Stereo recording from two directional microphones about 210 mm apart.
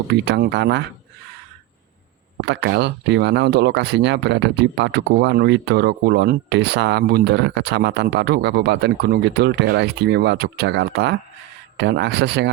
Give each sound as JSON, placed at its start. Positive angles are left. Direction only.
{"t": 0.1, "sound": "speech", "side_deg": -50}
{"t": 2.5, "sound": "speech", "side_deg": -55}